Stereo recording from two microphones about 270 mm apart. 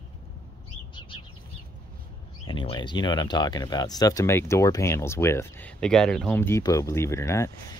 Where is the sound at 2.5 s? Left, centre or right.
Centre.